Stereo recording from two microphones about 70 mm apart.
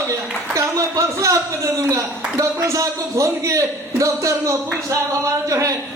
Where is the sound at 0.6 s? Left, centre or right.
Right.